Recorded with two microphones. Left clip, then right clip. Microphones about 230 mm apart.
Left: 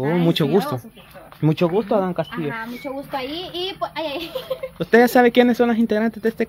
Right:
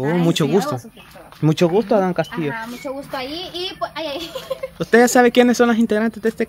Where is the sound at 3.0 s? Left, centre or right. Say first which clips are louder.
Even; centre.